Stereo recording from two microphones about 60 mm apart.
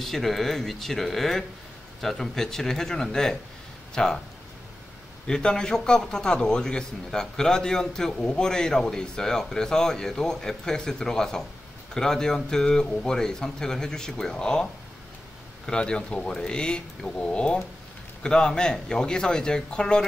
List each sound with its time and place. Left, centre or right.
0.0 s a man's voice: centre
5.2 s a man's voice: centre